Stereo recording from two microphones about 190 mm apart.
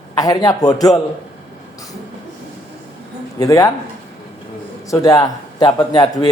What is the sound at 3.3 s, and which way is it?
Speech, 15° left (ahead or behind).